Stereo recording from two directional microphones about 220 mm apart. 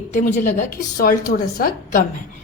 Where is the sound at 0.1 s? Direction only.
35° left (ahead or behind).